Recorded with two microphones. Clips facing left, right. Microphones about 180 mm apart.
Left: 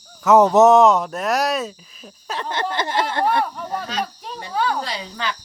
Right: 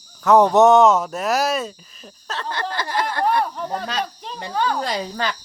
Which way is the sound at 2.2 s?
15° left (ahead or behind).